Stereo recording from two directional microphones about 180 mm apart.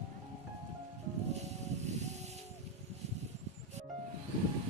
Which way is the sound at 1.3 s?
40° right (ahead or behind).